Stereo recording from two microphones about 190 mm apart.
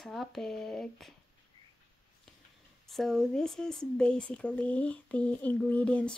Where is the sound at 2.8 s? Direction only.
Centre (ahead or behind).